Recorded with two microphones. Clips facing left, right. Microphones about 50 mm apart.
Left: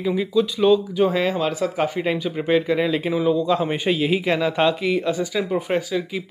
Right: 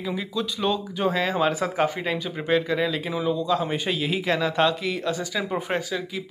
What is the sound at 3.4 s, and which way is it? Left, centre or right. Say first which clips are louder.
Speech: left 3 dB; left.